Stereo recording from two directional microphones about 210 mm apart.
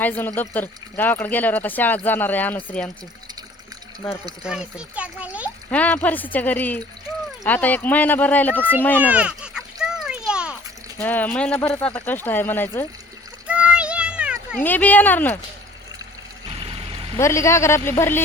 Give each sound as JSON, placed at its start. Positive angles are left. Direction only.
{"t": 0.0, "sound": "a child's voice", "side_deg": 10}
{"t": 4.4, "sound": "a child's voice", "side_deg": -5}
{"t": 5.7, "sound": "speech", "side_deg": 5}
{"t": 9.0, "sound": "a sound", "side_deg": -5}
{"t": 11.0, "sound": "speech", "side_deg": 10}
{"t": 13.5, "sound": "child singing", "side_deg": -5}
{"t": 14.6, "sound": "speech", "side_deg": 10}
{"t": 16.5, "sound": "music", "side_deg": -25}
{"t": 17.2, "sound": "speech", "side_deg": 15}